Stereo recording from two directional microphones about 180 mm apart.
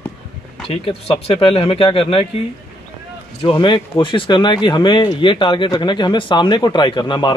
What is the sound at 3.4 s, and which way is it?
A man's voice, 25° left (ahead or behind).